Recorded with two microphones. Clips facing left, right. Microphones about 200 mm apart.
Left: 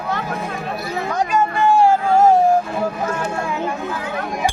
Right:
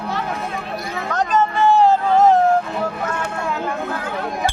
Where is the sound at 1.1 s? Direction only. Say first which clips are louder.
Right 1 dB; 10° left (ahead or behind).